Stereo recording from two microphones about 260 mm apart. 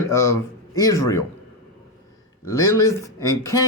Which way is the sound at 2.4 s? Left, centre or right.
Centre.